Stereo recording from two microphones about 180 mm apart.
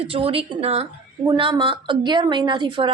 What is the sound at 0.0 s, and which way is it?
A woman's voice, 30° right (ahead or behind).